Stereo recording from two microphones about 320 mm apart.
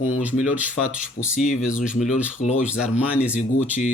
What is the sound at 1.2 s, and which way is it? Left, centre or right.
Speech, left.